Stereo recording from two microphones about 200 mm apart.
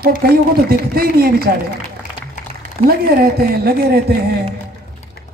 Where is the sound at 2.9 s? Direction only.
50° right (ahead or behind).